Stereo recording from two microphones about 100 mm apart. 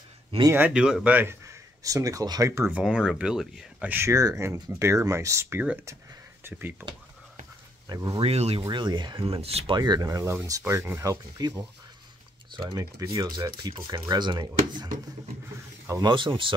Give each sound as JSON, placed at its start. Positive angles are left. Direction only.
{"t": 0.5, "sound": "speech", "side_deg": -15}
{"t": 1.5, "sound": "speech", "side_deg": -35}
{"t": 2.8, "sound": "speech", "side_deg": -5}
{"t": 3.9, "sound": "speech", "side_deg": -30}
{"t": 7.9, "sound": "speech", "side_deg": -40}
{"t": 8.2, "sound": "speech", "side_deg": -90}
{"t": 8.6, "sound": "speech", "side_deg": -50}
{"t": 9.8, "sound": "speech", "side_deg": -40}
{"t": 10.6, "sound": "speech", "side_deg": -25}
{"t": 11.0, "sound": "speech", "side_deg": -35}
{"t": 16.0, "sound": "speech", "side_deg": -50}